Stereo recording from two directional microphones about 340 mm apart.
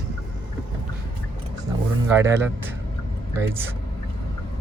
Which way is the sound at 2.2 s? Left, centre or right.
Centre.